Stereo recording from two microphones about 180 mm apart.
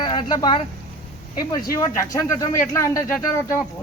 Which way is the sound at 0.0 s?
25° left (ahead or behind).